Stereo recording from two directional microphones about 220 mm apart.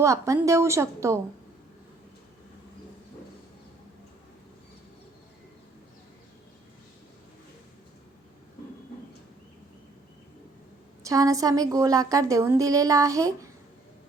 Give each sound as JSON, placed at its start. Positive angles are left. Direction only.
{"t": 0.0, "sound": "a woman's voice", "side_deg": -15}
{"t": 11.1, "sound": "a woman's voice", "side_deg": -15}